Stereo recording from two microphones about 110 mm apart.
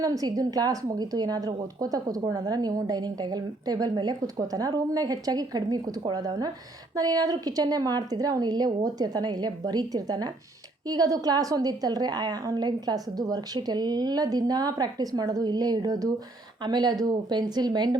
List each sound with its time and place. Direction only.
0.0 s a woman's voice: 35° right (ahead or behind)